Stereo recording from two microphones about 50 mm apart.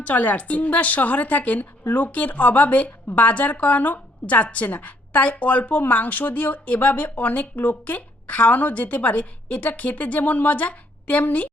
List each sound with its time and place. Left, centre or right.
0.0 s speech: left